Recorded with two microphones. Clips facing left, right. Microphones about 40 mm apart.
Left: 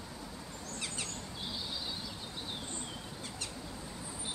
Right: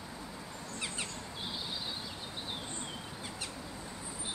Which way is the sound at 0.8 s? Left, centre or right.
Right.